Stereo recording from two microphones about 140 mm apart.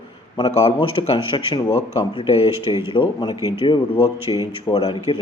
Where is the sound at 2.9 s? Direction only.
35° left (ahead or behind).